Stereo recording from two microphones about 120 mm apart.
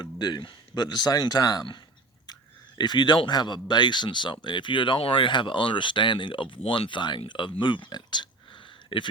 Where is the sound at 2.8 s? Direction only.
35° left (ahead or behind).